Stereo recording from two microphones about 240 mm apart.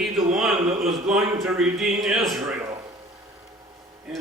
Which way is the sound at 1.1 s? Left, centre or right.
Centre.